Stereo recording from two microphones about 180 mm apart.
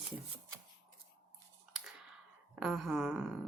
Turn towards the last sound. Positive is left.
turn(degrees=0)  # may be behind; listen again after turning